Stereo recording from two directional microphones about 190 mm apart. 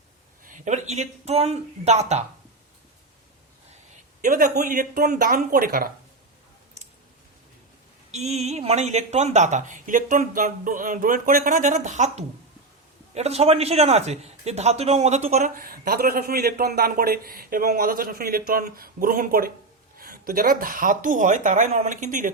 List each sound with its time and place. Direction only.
0.4 s speech: 40° right (ahead or behind)
4.2 s a man's voice: 45° right (ahead or behind)
8.1 s a man's voice: 35° right (ahead or behind)